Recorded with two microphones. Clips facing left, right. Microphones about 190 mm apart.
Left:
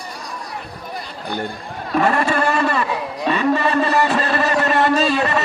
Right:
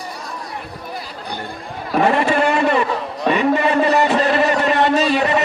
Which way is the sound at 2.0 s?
20° right (ahead or behind).